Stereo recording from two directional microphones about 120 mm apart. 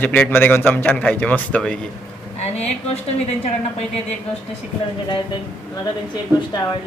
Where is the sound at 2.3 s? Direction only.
65° left (ahead or behind).